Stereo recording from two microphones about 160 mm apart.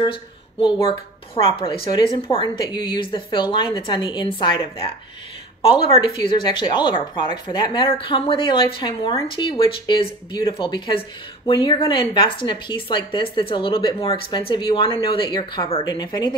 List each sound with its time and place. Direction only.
0.0 s a woman's voice: 30° left (ahead or behind)